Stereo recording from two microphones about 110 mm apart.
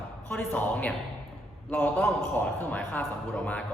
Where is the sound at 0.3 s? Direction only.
15° left (ahead or behind).